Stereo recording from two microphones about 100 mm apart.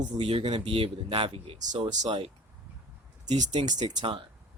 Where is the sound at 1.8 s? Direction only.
50° right (ahead or behind).